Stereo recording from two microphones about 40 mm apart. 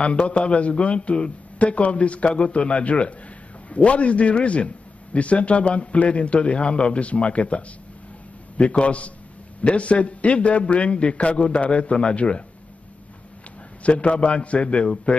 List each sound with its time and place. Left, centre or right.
0.0 s a man's voice: left
13.8 s a man's voice: left